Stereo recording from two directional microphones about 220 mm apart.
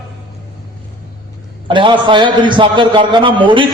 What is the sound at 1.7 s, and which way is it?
A man's voice, 20° right (ahead or behind).